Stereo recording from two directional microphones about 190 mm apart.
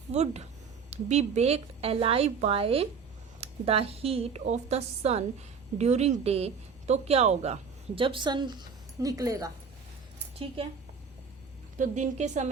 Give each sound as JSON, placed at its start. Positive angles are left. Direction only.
{"t": 0.1, "sound": "a woman's voice", "side_deg": -35}
{"t": 10.6, "sound": "a woman's voice", "side_deg": -30}
{"t": 11.8, "sound": "a woman's voice", "side_deg": -40}